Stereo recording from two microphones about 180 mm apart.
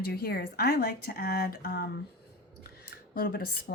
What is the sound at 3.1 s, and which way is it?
Speech, 55° left (ahead or behind).